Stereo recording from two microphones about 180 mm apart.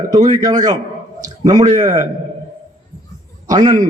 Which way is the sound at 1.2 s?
20° right (ahead or behind).